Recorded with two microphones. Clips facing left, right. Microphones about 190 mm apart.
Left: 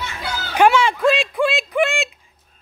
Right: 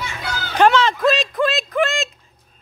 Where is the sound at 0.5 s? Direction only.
10° left (ahead or behind).